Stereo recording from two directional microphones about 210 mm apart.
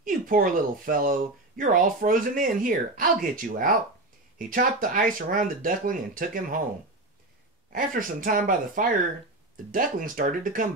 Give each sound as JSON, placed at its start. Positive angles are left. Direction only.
{"t": 0.0, "sound": "speech", "side_deg": -40}
{"t": 7.7, "sound": "speech", "side_deg": -40}